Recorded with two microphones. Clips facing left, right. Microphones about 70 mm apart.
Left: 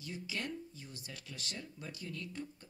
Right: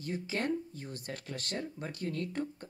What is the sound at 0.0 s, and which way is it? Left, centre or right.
Speech, right.